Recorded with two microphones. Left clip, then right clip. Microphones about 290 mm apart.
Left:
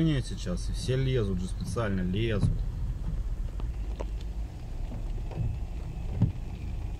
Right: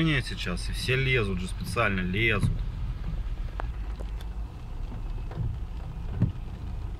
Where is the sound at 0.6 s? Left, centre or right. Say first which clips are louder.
Right 6 dB; right.